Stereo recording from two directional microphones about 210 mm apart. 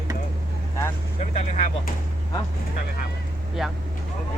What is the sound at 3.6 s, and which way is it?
Speech, centre (ahead or behind).